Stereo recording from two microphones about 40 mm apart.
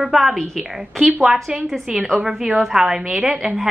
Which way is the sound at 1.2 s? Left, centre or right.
Centre.